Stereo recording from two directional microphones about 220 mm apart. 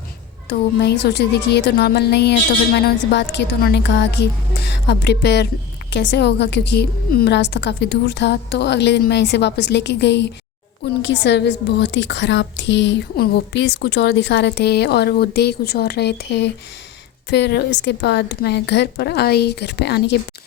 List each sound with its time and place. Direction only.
0.8 s a woman's voice: 50° left (ahead or behind)